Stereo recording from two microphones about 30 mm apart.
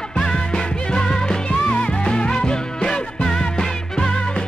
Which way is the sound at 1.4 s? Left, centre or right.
Left.